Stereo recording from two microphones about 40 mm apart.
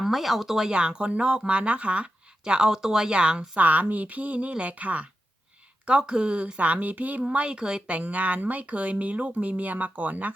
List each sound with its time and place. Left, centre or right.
0.0 s speech: centre
0.7 s speech: right
2.4 s speech: centre
3.6 s speech: right
5.8 s speech: right